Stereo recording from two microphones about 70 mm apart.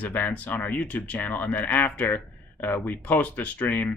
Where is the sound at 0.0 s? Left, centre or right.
Left.